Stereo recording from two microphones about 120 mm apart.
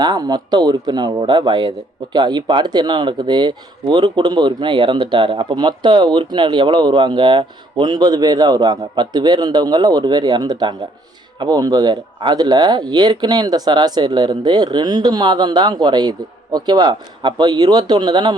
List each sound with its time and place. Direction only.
0.0 s speech: 35° right (ahead or behind)